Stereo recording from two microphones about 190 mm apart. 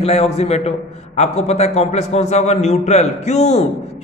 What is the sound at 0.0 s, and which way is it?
A man's voice, 35° left (ahead or behind).